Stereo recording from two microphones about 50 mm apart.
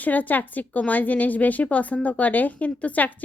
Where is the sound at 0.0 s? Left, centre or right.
Left.